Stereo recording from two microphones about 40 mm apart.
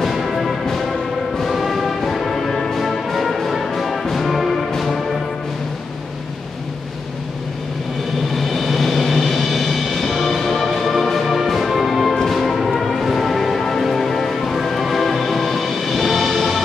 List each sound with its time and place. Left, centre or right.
0.0 s music: centre
8.4 s music: centre